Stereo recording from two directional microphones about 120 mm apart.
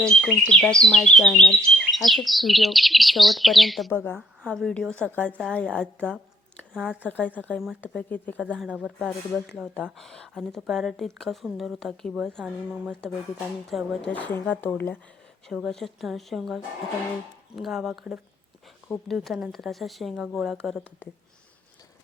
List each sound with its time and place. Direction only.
0.0 s speech: centre (ahead or behind)
3.9 s a woman's voice: 20° left (ahead or behind)
4.5 s a woman's voice: 5° left (ahead or behind)
6.7 s speech: 5° right (ahead or behind)
7.1 s a woman's voice: 15° left (ahead or behind)
8.6 s speech: 5° right (ahead or behind)
9.6 s speech: 5° left (ahead or behind)
14.1 s a woman's voice: 10° left (ahead or behind)
15.4 s speech: centre (ahead or behind)